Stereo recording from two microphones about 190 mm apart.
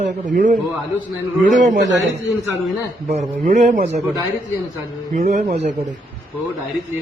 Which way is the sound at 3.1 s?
40° right (ahead or behind).